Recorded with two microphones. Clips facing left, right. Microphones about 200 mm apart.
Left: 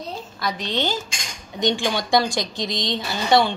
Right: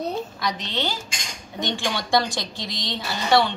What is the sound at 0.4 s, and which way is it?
Speech, 10° left (ahead or behind).